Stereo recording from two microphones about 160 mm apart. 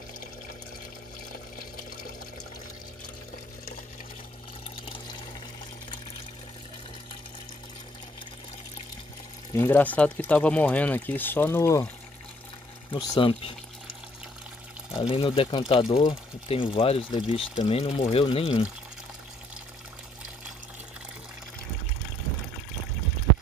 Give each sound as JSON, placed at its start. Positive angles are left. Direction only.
{"t": 9.6, "sound": "speech", "side_deg": 10}
{"t": 12.9, "sound": "speech", "side_deg": 30}
{"t": 15.0, "sound": "speech", "side_deg": 35}